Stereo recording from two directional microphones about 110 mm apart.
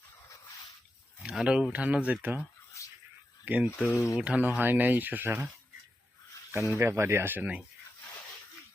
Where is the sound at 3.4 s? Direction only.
15° right (ahead or behind).